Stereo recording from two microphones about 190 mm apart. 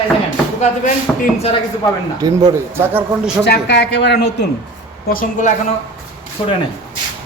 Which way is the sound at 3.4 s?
65° left (ahead or behind).